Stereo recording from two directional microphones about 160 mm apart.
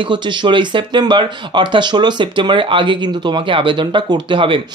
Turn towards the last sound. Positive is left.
turn(degrees=-30)  # may be behind; listen again after turning